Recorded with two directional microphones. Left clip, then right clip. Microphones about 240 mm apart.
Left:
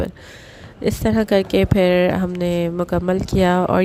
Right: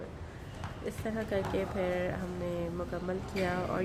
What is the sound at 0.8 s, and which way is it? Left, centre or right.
Speech, left.